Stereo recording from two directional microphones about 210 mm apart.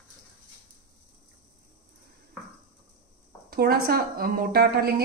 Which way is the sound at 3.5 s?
45° right (ahead or behind).